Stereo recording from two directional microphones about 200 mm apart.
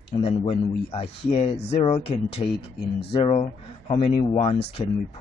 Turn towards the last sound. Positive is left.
turn(degrees=30)  # may be behind; listen again after turning